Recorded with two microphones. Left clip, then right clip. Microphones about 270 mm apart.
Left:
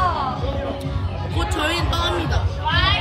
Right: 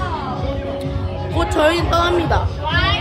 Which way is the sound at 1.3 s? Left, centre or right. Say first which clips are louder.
Right 7 dB; centre.